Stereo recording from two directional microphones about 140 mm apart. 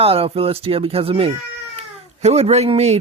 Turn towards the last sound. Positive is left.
turn(degrees=-50)  # may be behind; listen again after turning